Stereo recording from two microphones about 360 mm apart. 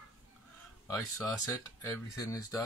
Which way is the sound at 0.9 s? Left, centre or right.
Centre.